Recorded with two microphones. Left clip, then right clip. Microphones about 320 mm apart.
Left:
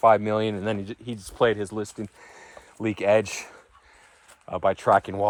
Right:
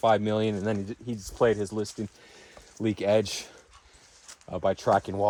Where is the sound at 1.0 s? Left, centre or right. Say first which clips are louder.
Left 1 dB; left.